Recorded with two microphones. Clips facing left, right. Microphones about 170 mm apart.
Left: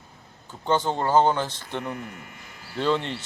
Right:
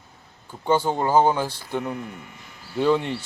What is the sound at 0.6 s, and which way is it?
Speech, 10° right (ahead or behind).